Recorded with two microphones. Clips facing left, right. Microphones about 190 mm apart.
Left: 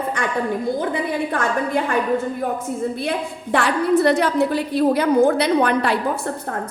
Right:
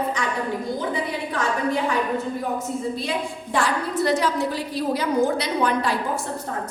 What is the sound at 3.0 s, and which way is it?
A woman's voice, 60° left (ahead or behind).